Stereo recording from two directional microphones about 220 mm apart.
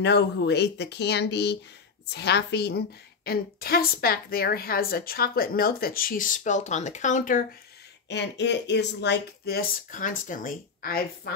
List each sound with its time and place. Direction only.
0.0 s a woman's voice: 50° left (ahead or behind)
8.1 s a woman's voice: 50° left (ahead or behind)